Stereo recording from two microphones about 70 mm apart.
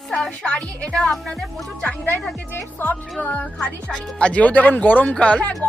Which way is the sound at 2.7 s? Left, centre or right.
Left.